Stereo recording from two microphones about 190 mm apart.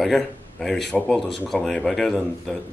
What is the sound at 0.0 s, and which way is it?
Speech, centre (ahead or behind).